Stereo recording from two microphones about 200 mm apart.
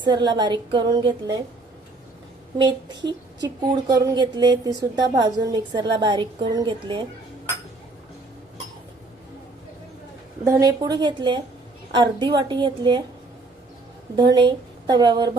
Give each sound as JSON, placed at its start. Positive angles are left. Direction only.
{"t": 0.0, "sound": "a woman's voice", "side_deg": -20}
{"t": 2.6, "sound": "a woman's voice", "side_deg": -20}
{"t": 10.4, "sound": "a woman's voice", "side_deg": -15}
{"t": 14.2, "sound": "a woman's voice", "side_deg": -25}